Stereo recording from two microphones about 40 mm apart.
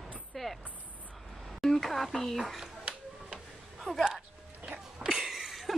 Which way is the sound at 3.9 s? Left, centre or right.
Left.